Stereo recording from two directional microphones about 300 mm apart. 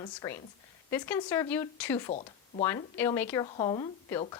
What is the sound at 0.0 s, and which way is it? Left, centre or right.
A woman's voice, centre.